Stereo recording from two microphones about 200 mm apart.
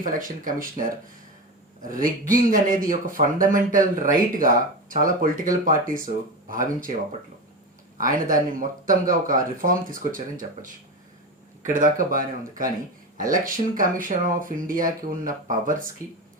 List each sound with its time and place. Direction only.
0.0 s a man's voice: 45° right (ahead or behind)
7.9 s a man's voice: 45° right (ahead or behind)